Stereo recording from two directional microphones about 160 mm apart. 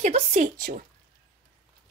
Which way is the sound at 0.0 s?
45° right (ahead or behind).